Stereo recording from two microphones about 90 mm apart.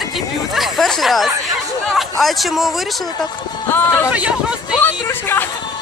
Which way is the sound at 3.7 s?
25° left (ahead or behind).